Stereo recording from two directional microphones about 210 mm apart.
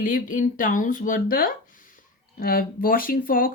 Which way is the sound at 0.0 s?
40° left (ahead or behind).